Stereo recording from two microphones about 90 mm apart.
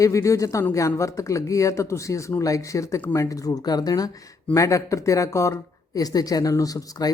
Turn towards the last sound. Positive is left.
turn(degrees=45)  # may be behind; listen again after turning